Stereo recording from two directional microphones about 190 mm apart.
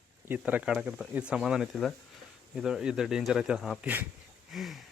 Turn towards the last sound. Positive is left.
turn(degrees=0)  # may be behind; listen again after turning